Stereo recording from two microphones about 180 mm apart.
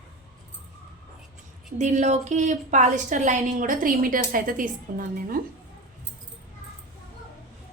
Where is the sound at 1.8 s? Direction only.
40° right (ahead or behind).